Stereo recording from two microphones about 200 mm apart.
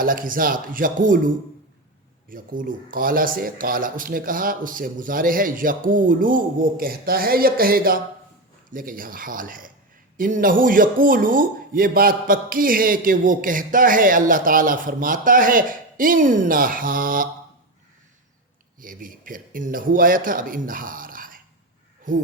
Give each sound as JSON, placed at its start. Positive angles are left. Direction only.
{"t": 0.0, "sound": "speech", "side_deg": -45}
{"t": 2.3, "sound": "speech", "side_deg": -45}
{"t": 18.8, "sound": "a man's voice", "side_deg": -45}